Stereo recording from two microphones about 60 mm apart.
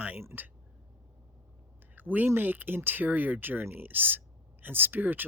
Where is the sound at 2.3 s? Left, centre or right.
Right.